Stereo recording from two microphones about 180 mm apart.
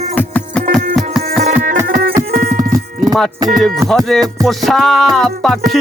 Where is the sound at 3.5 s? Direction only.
Centre (ahead or behind).